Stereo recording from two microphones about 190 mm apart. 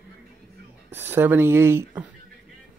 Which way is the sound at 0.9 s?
10° right (ahead or behind).